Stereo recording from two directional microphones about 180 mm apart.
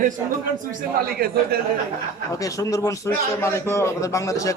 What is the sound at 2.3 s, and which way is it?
A man's voice, 20° left (ahead or behind).